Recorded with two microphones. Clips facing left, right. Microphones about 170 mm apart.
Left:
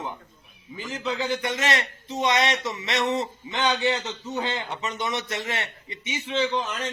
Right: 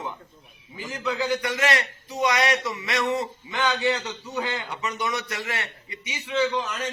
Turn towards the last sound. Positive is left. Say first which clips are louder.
# right 1 dB
turn(degrees=25)  # may be behind; listen again after turning